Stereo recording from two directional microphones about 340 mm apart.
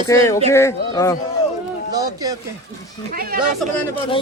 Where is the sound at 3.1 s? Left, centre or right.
Right.